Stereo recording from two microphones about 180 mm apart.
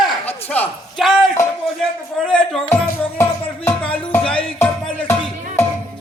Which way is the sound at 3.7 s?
10° left (ahead or behind).